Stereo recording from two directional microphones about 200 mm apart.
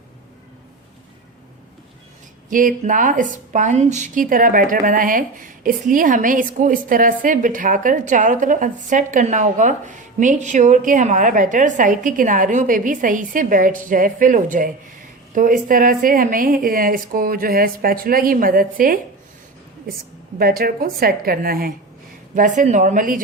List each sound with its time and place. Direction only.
2.5 s a woman's voice: 40° right (ahead or behind)
20.4 s a woman's voice: 50° right (ahead or behind)